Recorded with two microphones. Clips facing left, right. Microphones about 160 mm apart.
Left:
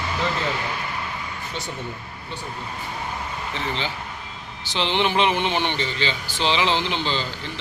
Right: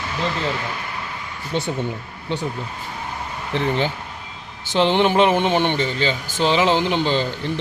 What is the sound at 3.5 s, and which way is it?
Speech, 55° right (ahead or behind).